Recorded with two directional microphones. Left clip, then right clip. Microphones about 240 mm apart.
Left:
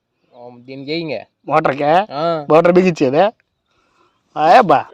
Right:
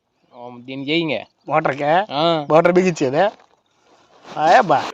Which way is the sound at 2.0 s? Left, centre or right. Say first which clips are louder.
Right 1 dB; left.